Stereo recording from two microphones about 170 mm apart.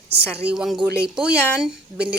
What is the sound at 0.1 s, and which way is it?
Speech, 75° right (ahead or behind).